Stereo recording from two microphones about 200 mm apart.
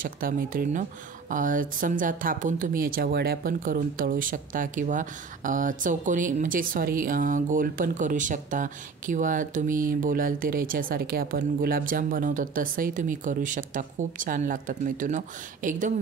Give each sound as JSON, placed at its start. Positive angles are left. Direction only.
{"t": 0.0, "sound": "speech", "side_deg": -45}